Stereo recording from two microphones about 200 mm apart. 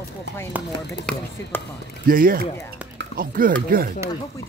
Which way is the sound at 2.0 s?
45° right (ahead or behind).